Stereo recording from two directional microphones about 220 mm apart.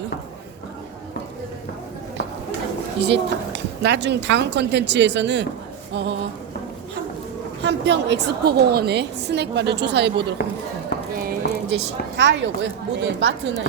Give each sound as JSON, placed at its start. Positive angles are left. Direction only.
{"t": 3.0, "sound": "a woman's voice", "side_deg": -50}
{"t": 7.6, "sound": "a woman's voice", "side_deg": -50}